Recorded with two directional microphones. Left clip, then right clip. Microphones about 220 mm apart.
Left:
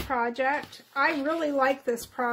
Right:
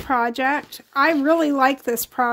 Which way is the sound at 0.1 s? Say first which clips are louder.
Right 7 dB; 55° right (ahead or behind).